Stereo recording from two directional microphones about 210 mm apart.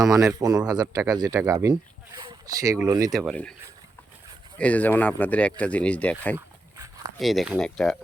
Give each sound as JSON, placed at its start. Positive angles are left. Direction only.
{"t": 0.1, "sound": "speech", "side_deg": -15}
{"t": 3.2, "sound": "speech", "side_deg": 5}
{"t": 4.5, "sound": "speech", "side_deg": 5}
{"t": 6.3, "sound": "dog", "side_deg": -15}
{"t": 7.2, "sound": "speech", "side_deg": 0}